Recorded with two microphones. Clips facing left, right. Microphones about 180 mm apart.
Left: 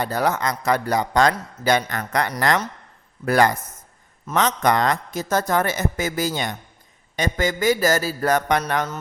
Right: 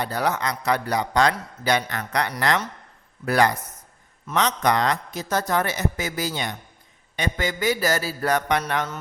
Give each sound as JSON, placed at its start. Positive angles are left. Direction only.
{"t": 0.0, "sound": "a man's voice", "side_deg": 45}